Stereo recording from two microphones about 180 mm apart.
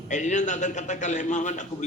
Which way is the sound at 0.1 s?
40° left (ahead or behind).